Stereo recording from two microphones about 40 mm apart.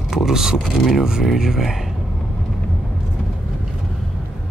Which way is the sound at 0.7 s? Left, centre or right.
Centre.